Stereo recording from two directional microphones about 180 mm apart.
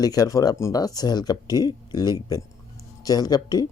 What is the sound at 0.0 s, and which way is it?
Speech, 20° left (ahead or behind).